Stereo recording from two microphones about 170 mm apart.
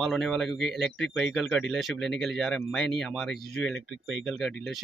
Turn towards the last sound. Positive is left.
turn(degrees=5)  # may be behind; listen again after turning